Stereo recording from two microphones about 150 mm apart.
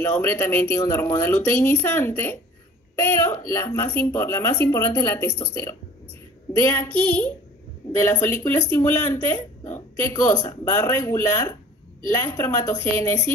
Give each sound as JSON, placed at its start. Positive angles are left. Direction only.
{"t": 0.0, "sound": "speech", "side_deg": 15}